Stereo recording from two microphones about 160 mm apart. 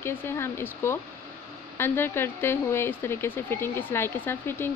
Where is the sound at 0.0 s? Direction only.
15° left (ahead or behind).